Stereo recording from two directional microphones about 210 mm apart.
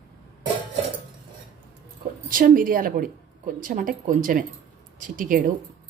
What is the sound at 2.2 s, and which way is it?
Speech, 40° right (ahead or behind).